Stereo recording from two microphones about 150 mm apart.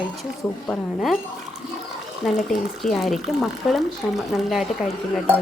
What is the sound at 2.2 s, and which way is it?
Speech, centre (ahead or behind).